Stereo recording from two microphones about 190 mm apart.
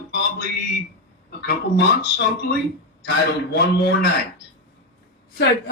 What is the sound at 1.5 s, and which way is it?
Speech, 65° left (ahead or behind).